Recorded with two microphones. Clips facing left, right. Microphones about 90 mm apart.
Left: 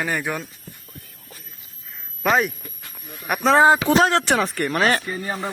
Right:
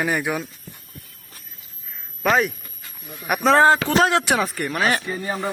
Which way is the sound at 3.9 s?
Centre (ahead or behind).